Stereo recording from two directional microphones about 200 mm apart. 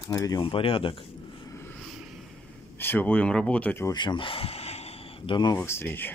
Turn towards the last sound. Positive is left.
turn(degrees=10)  # may be behind; listen again after turning